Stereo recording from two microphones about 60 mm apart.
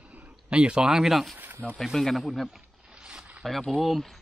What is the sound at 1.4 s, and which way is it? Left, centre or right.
Speech, right.